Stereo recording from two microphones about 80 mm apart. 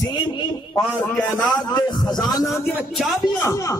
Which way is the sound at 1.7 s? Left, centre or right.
Left.